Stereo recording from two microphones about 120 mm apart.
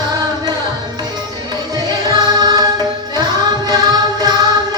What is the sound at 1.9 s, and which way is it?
Music, 35° right (ahead or behind).